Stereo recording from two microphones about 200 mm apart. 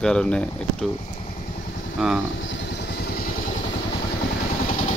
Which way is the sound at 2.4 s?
65° left (ahead or behind).